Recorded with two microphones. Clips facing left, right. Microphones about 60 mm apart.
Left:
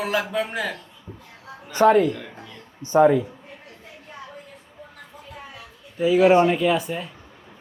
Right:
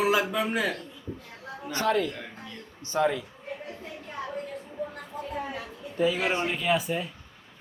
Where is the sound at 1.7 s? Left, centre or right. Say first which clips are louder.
Left 10 dB; left.